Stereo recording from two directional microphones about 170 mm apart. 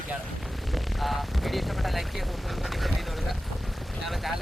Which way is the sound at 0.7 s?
Centre (ahead or behind).